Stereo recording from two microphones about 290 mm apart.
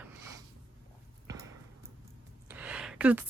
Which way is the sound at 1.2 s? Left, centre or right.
Centre.